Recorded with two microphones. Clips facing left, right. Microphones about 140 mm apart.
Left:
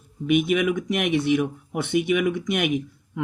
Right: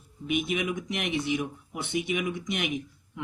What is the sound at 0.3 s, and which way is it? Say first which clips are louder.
Speech: left 8 dB; 60° left (ahead or behind).